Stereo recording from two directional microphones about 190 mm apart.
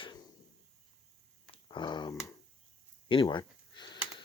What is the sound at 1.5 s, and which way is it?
Dog, 25° left (ahead or behind).